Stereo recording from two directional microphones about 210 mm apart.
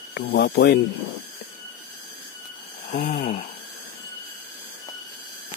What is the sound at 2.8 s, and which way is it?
Speech, 35° left (ahead or behind).